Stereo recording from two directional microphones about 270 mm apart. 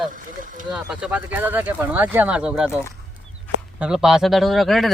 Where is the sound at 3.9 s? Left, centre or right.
Centre.